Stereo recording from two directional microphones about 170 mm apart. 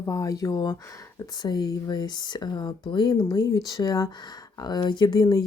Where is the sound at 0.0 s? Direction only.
20° left (ahead or behind).